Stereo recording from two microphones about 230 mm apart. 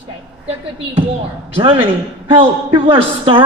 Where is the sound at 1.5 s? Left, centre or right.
Right.